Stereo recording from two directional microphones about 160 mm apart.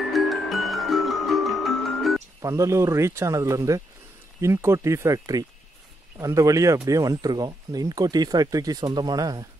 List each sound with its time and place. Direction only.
0.1 s music: centre (ahead or behind)
2.4 s speech: 20° right (ahead or behind)